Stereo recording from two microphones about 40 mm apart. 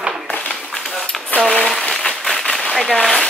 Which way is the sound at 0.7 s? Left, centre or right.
Centre.